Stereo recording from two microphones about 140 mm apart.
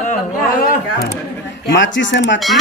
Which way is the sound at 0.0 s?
60° left (ahead or behind).